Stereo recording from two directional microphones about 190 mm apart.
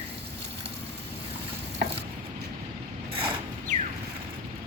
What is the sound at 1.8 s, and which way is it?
Stir, 60° right (ahead or behind).